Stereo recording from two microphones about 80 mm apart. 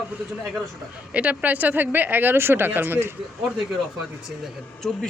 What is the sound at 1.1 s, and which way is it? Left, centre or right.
Speech, centre.